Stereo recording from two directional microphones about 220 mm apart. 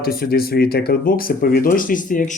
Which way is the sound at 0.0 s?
45° left (ahead or behind).